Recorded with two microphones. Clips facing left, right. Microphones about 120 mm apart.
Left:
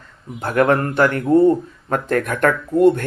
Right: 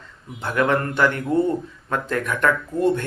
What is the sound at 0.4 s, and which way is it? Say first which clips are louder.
Speech: left 4 dB; 45° left (ahead or behind).